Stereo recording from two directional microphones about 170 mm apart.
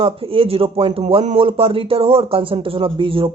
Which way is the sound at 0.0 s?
35° right (ahead or behind).